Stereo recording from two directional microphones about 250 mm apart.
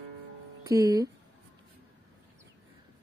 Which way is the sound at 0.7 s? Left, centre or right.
Centre.